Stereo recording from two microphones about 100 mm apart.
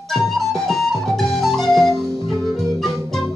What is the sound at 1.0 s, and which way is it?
Music, 5° left (ahead or behind).